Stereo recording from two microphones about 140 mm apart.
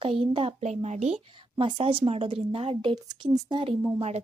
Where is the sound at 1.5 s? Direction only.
40° right (ahead or behind).